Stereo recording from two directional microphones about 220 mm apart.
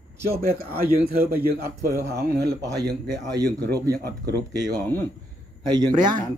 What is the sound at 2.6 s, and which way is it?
Speech, 15° right (ahead or behind).